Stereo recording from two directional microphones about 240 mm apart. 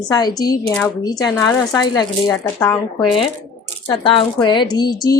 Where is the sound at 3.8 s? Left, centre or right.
Left.